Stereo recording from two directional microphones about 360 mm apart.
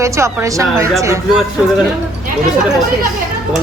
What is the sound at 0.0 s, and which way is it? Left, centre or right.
A woman's voice, centre.